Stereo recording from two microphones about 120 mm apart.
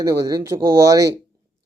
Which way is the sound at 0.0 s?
30° right (ahead or behind).